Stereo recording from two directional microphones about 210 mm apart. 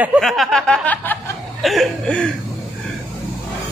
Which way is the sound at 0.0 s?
5° right (ahead or behind).